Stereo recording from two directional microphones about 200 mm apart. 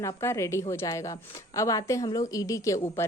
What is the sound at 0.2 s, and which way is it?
A woman's voice, 15° left (ahead or behind).